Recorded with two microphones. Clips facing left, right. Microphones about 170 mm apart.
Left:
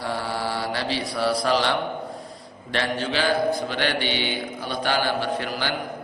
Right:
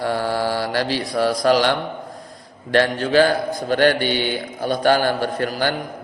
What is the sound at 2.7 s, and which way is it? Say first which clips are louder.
A man's voice: right 9 dB; 45° right (ahead or behind).